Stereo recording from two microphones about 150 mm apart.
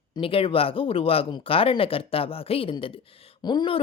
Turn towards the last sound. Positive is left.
turn(degrees=30)  # may be behind; listen again after turning